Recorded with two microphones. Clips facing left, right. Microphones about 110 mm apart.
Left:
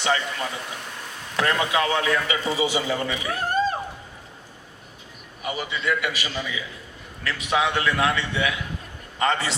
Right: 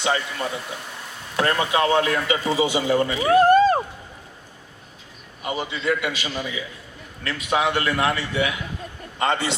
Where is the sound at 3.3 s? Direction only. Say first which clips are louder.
Right 11 dB; 70° right (ahead or behind).